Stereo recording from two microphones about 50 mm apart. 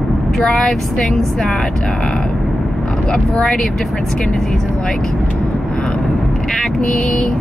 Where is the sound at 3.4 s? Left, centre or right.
Centre.